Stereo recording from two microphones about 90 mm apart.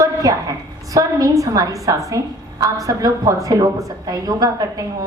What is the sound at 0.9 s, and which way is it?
A woman's voice, 40° right (ahead or behind).